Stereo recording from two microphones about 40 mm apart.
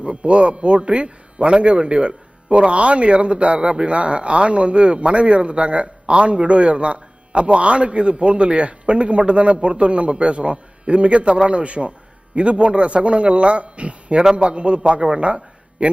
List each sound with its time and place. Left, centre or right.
0.0 s a man's voice: right